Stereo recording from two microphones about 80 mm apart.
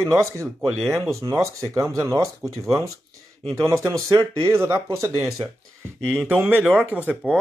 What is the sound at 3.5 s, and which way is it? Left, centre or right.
Speech, right.